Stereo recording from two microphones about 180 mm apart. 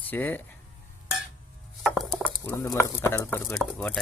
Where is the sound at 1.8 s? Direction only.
Centre (ahead or behind).